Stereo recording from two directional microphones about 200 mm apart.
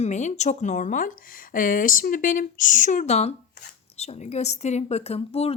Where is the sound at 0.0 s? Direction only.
35° left (ahead or behind).